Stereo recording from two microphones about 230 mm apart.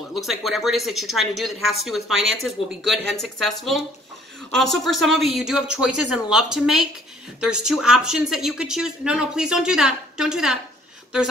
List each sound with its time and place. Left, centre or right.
0.1 s speech: centre